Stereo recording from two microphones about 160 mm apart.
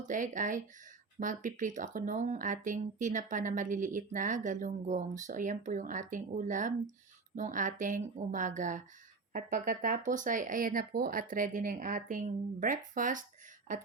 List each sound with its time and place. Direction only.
0.1 s speech: 55° right (ahead or behind)